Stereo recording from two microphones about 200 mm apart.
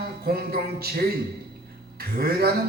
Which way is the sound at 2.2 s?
50° right (ahead or behind).